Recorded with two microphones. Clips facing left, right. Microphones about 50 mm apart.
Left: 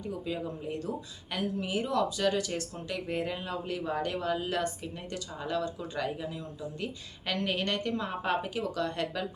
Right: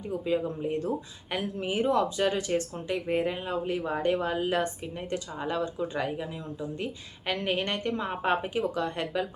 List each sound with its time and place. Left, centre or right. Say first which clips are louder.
0.3 s speech: right 6 dB; right